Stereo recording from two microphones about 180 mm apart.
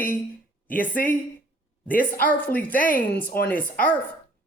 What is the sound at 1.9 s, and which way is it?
Speech, 50° left (ahead or behind).